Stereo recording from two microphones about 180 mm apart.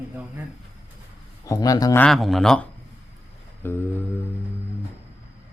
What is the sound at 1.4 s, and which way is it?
Speech, 20° left (ahead or behind).